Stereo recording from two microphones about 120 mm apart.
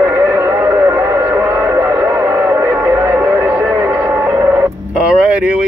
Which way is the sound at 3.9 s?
15° right (ahead or behind).